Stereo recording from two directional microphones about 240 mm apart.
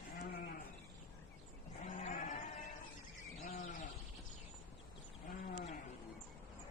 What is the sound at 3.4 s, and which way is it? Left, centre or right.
Bird, left.